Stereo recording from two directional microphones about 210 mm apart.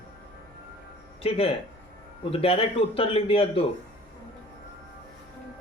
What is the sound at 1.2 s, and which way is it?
A man's voice, 25° left (ahead or behind).